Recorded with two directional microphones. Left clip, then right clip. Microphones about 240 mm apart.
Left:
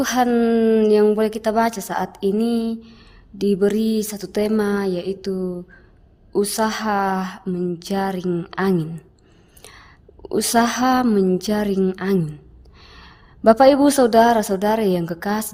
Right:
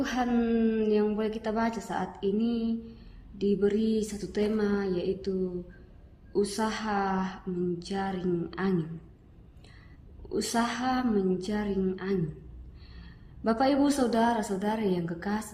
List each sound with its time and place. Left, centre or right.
0.0 s a woman's voice: left
6.3 s a woman's voice: left
9.6 s whispering: left
10.2 s a woman's voice: left